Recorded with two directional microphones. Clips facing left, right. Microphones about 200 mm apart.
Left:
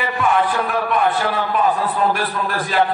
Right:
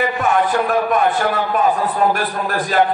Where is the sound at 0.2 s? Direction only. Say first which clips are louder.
Left 1 dB; 45° right (ahead or behind).